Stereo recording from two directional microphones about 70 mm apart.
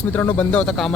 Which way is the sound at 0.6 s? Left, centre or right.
Centre.